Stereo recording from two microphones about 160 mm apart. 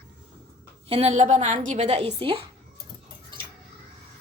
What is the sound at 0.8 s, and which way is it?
A woman's voice, 40° right (ahead or behind).